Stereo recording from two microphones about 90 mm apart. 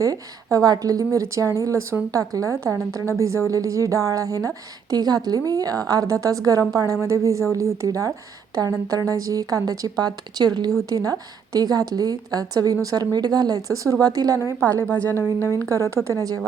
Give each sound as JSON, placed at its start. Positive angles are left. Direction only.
{"t": 0.0, "sound": "a woman's voice", "side_deg": -40}
{"t": 14.8, "sound": "a woman's voice", "side_deg": 15}
{"t": 16.0, "sound": "a woman's voice", "side_deg": -40}